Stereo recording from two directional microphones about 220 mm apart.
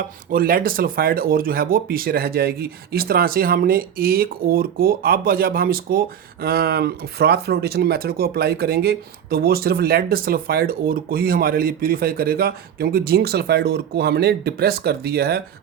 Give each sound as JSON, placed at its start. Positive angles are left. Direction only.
{"t": 0.3, "sound": "speech", "side_deg": -40}